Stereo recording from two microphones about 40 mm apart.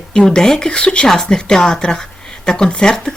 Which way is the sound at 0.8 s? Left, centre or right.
Left.